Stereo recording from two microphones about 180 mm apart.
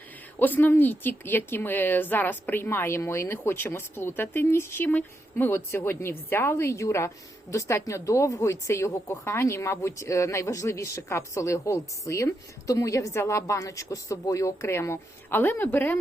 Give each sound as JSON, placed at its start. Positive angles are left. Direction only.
{"t": 0.3, "sound": "speech", "side_deg": 10}